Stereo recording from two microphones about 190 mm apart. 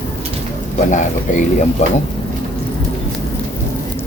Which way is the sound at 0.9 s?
40° left (ahead or behind).